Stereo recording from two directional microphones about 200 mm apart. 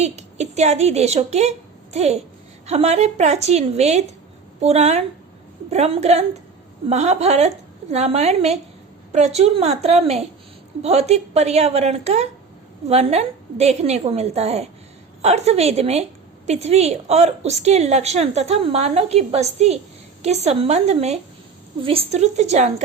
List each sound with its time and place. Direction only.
0.0 s a woman's voice: 35° right (ahead or behind)